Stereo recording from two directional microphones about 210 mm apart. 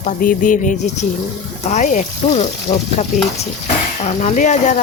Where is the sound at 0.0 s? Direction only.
40° left (ahead or behind).